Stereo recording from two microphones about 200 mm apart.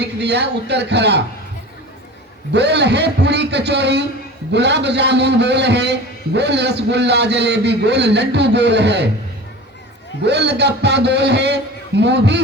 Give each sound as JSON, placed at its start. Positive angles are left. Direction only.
{"t": 0.0, "sound": "a man's voice", "side_deg": -55}
{"t": 2.5, "sound": "a man's voice", "side_deg": -55}
{"t": 10.2, "sound": "a man's voice", "side_deg": -55}